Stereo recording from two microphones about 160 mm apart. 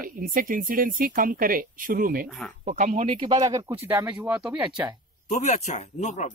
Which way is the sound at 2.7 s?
50° right (ahead or behind).